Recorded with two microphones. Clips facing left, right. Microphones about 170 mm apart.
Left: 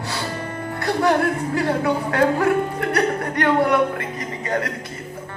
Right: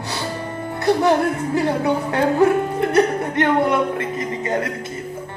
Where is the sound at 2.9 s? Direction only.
25° right (ahead or behind).